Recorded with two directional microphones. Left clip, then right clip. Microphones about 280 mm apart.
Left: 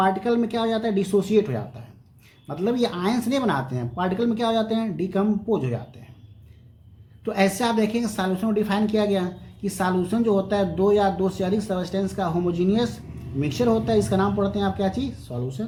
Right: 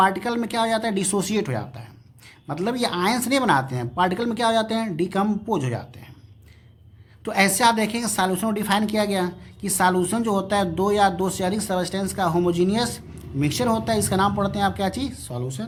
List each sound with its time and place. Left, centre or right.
0.0 s a woman's voice: right
7.3 s a woman's voice: right